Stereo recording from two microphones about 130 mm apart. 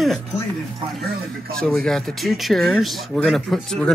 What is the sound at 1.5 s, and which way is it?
Speech, 5° left (ahead or behind).